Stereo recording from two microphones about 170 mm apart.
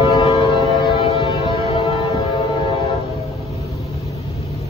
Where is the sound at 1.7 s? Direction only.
30° left (ahead or behind).